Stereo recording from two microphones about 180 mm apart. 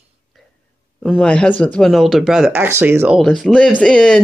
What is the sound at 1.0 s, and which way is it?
Speech, centre (ahead or behind).